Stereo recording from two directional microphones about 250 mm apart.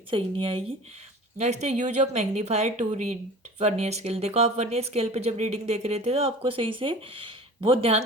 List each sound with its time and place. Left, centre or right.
0.1 s speech: right